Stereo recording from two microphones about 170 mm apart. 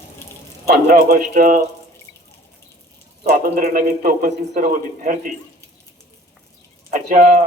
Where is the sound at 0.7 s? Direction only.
60° right (ahead or behind).